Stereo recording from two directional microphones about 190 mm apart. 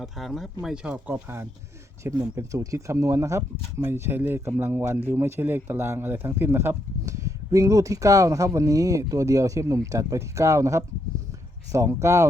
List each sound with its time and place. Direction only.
0.0 s speech: centre (ahead or behind); by 12.3 s 15° right (ahead or behind)